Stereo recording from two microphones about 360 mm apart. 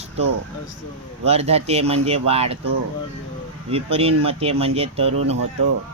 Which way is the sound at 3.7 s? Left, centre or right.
Centre.